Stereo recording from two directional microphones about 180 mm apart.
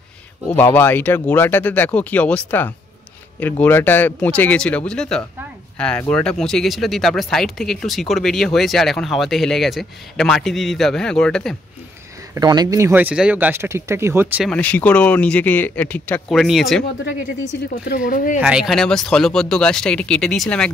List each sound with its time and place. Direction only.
0.5 s speech: 10° left (ahead or behind)
12.4 s speech: 20° right (ahead or behind)
14.4 s speech: 5° left (ahead or behind)
17.0 s speech: 70° left (ahead or behind); by 18.4 s 50° left (ahead or behind)
18.4 s speech: 5° right (ahead or behind)